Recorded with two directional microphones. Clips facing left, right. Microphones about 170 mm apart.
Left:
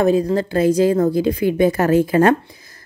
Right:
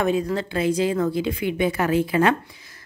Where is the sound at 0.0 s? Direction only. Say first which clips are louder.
Left 6 dB; 35° left (ahead or behind).